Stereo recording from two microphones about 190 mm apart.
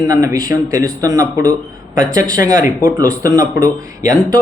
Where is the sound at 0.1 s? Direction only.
20° right (ahead or behind).